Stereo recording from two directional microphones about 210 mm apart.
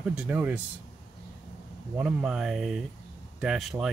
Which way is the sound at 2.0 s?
5° right (ahead or behind).